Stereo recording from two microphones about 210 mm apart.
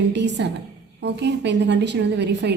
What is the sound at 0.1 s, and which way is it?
A woman's voice, 55° right (ahead or behind).